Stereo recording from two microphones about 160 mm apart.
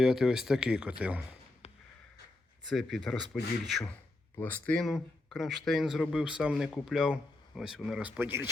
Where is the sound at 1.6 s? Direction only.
40° left (ahead or behind).